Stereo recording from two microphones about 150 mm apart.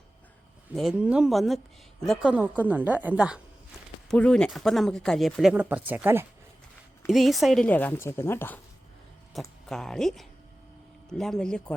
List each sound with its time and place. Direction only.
0.7 s a woman's voice: centre (ahead or behind)
4.1 s speech: 5° left (ahead or behind); by 6.2 s 10° right (ahead or behind)
7.1 s a woman's voice: centre (ahead or behind)
9.3 s speech: centre (ahead or behind)